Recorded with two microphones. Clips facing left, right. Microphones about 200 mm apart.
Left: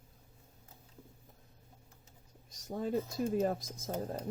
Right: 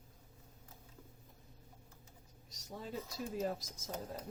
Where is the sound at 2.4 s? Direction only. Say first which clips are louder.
Left 10 dB; 50° left (ahead or behind).